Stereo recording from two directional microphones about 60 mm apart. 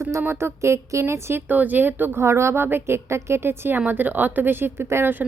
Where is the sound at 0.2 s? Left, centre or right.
Right.